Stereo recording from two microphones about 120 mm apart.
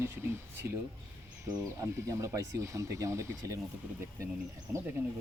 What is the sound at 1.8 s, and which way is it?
Speech, 25° right (ahead or behind).